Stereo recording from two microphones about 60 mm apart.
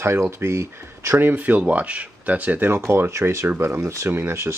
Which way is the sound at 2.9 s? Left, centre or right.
Right.